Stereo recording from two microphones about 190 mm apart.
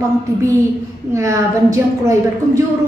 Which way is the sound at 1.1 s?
15° right (ahead or behind).